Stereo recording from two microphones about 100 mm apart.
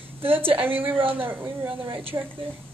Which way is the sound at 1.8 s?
55° right (ahead or behind).